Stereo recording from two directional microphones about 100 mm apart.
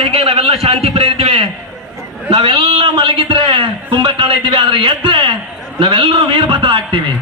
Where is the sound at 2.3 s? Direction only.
70° right (ahead or behind).